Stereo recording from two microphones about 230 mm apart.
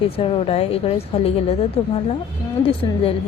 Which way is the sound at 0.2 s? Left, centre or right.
Left.